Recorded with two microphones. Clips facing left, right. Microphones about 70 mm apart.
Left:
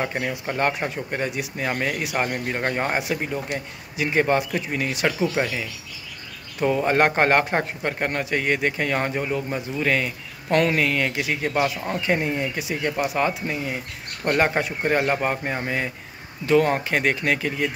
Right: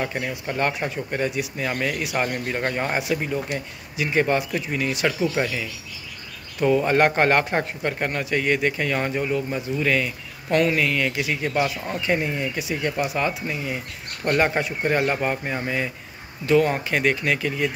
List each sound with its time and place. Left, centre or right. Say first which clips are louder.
0.0 s speech: left 1 dB; left
1.6 s speech: left 1 dB; left
3.0 s speech: right 1 dB; left
5.4 s speech: even; left
10.5 s speech: even; left
11.5 s speech: left 1 dB; centre
12.1 s speech: even; left
14.2 s speech: even; centre
14.9 s speech: even; left